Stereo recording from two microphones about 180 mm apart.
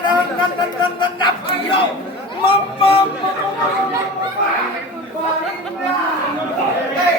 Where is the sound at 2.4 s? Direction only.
30° left (ahead or behind).